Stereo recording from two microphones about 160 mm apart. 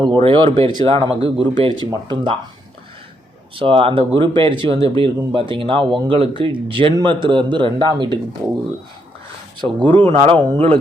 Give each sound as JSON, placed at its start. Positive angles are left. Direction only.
{"t": 0.2, "sound": "speech", "side_deg": -35}
{"t": 3.5, "sound": "speech", "side_deg": -35}
{"t": 9.6, "sound": "speech", "side_deg": -30}